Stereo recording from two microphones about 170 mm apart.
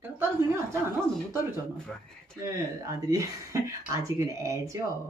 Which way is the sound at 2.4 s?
20° right (ahead or behind).